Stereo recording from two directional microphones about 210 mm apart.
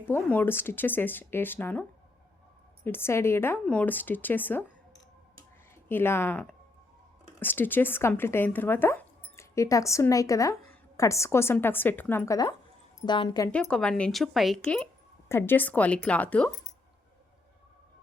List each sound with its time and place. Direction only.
0.0 s speech: 10° left (ahead or behind)
2.8 s speech: 10° left (ahead or behind)
5.9 s speech: 10° left (ahead or behind)
13.5 s speech: 5° left (ahead or behind)